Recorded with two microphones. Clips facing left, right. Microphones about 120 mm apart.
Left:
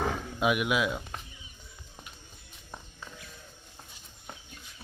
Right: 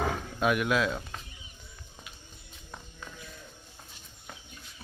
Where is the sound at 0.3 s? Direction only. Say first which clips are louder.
Right 1 dB; 15° left (ahead or behind).